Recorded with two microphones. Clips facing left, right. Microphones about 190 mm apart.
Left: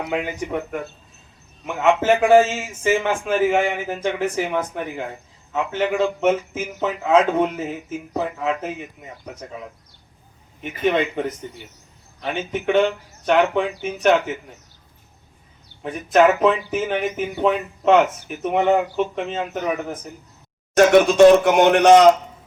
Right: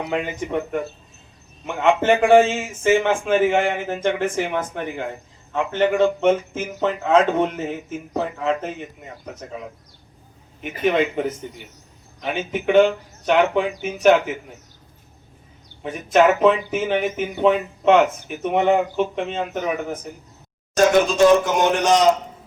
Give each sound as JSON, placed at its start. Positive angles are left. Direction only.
{"t": 0.1, "sound": "a man's voice", "side_deg": 10}
{"t": 10.6, "sound": "a man's voice", "side_deg": -5}
{"t": 15.8, "sound": "a man's voice", "side_deg": 0}
{"t": 20.7, "sound": "speech", "side_deg": 65}